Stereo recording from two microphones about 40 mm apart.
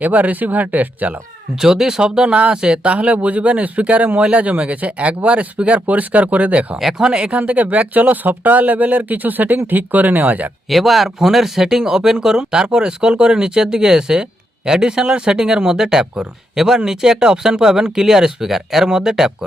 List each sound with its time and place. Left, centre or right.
0.0 s speech: right
1.6 s speech: centre
2.8 s speech: right
6.7 s speech: centre
7.3 s speech: right
8.1 s speech: right
10.7 s speech: centre